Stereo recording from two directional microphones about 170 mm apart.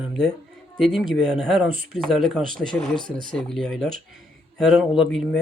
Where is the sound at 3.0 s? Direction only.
55° right (ahead or behind).